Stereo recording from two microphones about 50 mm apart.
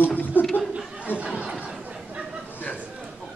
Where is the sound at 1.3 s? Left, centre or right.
Right.